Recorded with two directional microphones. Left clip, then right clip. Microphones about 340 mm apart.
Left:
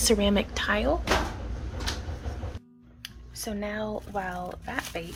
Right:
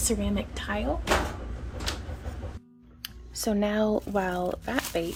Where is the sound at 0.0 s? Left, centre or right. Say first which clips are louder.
Left 6 dB; centre.